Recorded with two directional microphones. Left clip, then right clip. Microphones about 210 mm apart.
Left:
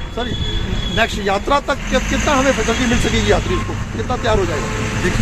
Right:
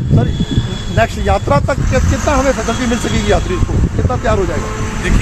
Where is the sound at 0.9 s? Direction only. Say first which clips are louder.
Right 3 dB; 45° right (ahead or behind).